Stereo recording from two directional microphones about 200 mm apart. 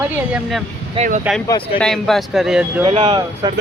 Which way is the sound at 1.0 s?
40° right (ahead or behind).